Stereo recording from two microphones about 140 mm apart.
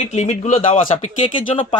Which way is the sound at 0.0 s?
55° left (ahead or behind).